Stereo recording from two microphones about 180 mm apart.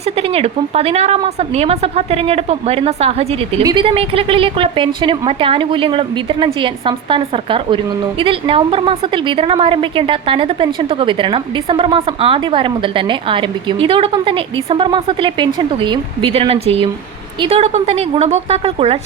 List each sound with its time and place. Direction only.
0.2 s a woman's voice: 35° right (ahead or behind)
3.6 s a woman's voice: 25° right (ahead or behind)